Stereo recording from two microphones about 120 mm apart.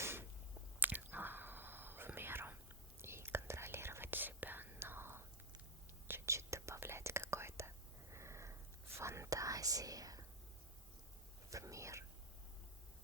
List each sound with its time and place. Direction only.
0.0 s a sound: 20° right (ahead or behind)
0.8 s whispering: 15° right (ahead or behind); by 10.2 s 30° right (ahead or behind)
11.5 s whispering: 25° right (ahead or behind)